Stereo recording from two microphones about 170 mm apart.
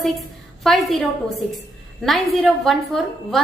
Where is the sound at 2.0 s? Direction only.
Centre (ahead or behind).